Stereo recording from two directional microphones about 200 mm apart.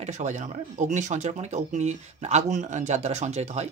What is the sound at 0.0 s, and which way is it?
Speech, 35° right (ahead or behind).